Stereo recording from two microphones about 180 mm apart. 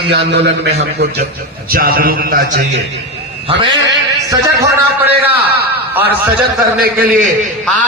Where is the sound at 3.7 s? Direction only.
75° right (ahead or behind).